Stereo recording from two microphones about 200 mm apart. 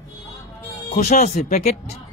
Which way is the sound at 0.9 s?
35° left (ahead or behind).